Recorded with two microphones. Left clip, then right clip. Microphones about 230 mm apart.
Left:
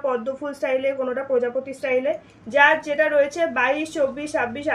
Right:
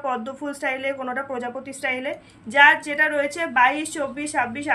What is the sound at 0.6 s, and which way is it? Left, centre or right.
A woman's voice, right.